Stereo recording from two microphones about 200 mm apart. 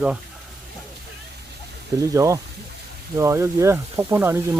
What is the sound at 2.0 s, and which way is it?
Speech, 15° right (ahead or behind).